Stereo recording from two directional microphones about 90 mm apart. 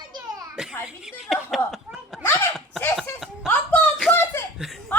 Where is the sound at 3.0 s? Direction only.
Centre (ahead or behind).